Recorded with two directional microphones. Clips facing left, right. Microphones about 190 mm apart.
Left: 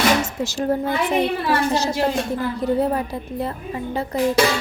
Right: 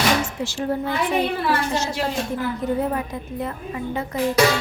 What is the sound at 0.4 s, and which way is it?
A woman's voice, 40° left (ahead or behind).